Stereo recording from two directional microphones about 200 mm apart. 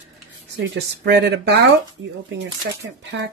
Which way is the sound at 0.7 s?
60° right (ahead or behind).